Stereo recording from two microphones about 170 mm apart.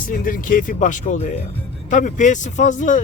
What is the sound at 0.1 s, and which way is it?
Speech, 55° left (ahead or behind).